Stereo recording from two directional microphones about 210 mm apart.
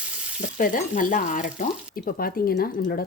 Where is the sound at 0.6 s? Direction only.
40° left (ahead or behind).